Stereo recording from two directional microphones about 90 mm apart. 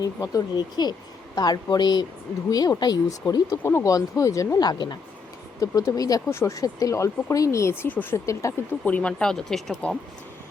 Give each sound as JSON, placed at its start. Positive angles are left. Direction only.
{"t": 0.0, "sound": "speech", "side_deg": 45}
{"t": 3.6, "sound": "speech", "side_deg": 25}
{"t": 3.8, "sound": "speech", "side_deg": 40}
{"t": 4.6, "sound": "speech", "side_deg": 50}
{"t": 5.5, "sound": "speech", "side_deg": 40}
{"t": 8.1, "sound": "speech", "side_deg": 35}
{"t": 8.8, "sound": "speech", "side_deg": 15}